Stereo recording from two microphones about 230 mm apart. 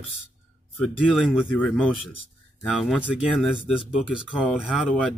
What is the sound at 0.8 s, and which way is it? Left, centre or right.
Speech, centre.